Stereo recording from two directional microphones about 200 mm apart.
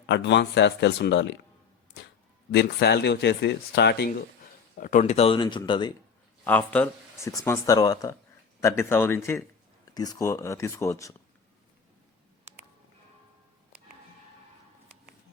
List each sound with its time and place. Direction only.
0.1 s speech: 60° left (ahead or behind)
2.5 s speech: 55° left (ahead or behind)
4.8 s speech: 40° left (ahead or behind); by 5.9 s 25° left (ahead or behind)
6.4 s speech: 5° left (ahead or behind)